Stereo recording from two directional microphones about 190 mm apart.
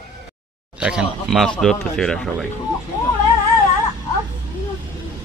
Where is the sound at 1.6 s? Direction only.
5° left (ahead or behind).